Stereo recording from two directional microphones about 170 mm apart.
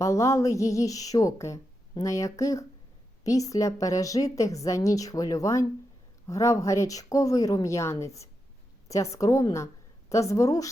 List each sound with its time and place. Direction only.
0.0 s speech: 20° left (ahead or behind)